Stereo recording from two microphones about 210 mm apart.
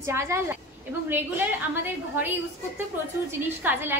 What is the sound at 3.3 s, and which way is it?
Speech, 10° right (ahead or behind).